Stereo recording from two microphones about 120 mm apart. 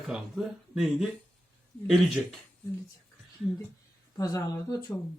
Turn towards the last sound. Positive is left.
turn(degrees=30)  # may be behind; listen again after turning